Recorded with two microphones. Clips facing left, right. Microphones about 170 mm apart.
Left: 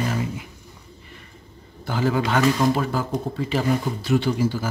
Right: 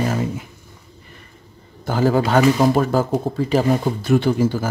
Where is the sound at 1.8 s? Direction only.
45° right (ahead or behind).